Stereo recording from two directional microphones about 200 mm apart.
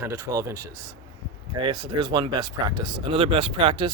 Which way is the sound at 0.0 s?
15° right (ahead or behind).